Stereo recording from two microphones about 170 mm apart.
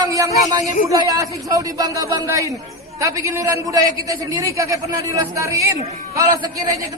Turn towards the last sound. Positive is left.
turn(degrees=-20)  # may be behind; listen again after turning